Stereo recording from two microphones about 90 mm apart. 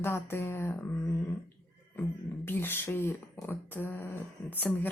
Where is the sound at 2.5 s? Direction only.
25° left (ahead or behind).